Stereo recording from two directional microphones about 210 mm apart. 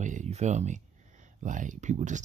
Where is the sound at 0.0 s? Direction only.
35° right (ahead or behind).